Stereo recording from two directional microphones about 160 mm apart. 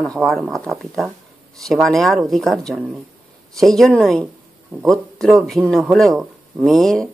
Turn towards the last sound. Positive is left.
turn(degrees=5)  # may be behind; listen again after turning